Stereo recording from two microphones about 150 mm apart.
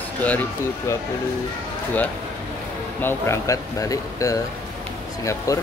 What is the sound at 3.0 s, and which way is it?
Speech, 15° left (ahead or behind).